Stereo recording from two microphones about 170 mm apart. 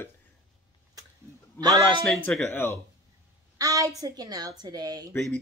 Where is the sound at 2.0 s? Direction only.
5° left (ahead or behind).